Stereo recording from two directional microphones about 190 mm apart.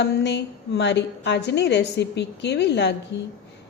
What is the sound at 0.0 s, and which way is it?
A woman's voice, 65° left (ahead or behind).